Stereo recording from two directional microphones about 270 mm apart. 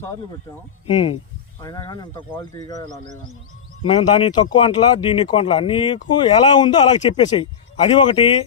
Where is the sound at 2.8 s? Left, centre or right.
Right.